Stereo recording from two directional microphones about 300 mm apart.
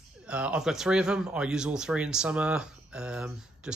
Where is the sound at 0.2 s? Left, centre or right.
Centre.